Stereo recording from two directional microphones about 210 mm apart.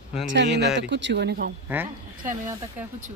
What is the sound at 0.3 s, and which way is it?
Speech, 55° right (ahead or behind).